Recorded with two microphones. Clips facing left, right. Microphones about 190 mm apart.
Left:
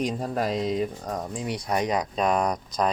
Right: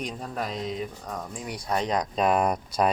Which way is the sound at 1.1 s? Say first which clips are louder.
Left 5 dB; 25° left (ahead or behind).